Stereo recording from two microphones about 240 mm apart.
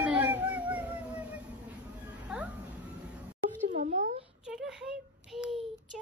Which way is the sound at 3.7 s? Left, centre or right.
Right.